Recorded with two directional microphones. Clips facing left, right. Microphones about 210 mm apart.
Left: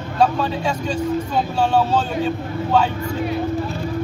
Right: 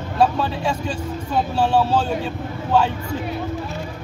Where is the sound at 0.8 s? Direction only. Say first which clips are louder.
Left 5 dB; 5° right (ahead or behind).